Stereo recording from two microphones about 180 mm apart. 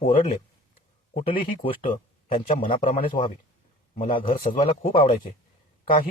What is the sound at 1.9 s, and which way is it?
Speech, 30° left (ahead or behind).